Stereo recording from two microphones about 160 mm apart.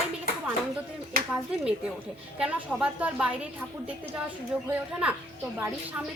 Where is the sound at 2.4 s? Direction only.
10° right (ahead or behind).